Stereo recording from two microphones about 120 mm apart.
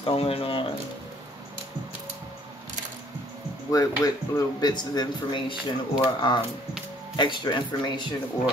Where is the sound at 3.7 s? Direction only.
30° left (ahead or behind).